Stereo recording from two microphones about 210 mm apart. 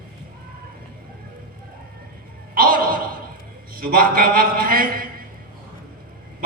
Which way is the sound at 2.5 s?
45° right (ahead or behind).